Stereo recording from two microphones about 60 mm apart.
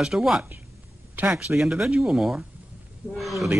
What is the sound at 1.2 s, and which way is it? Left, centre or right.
Speech, right.